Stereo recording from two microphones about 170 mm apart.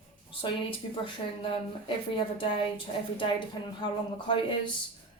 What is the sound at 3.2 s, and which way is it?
A woman's voice, 30° left (ahead or behind).